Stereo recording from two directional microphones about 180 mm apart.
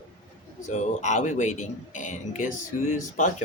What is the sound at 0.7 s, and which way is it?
A man's voice, 40° left (ahead or behind).